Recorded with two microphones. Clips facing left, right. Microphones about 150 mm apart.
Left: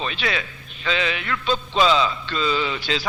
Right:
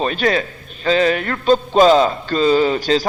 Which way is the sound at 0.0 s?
45° right (ahead or behind).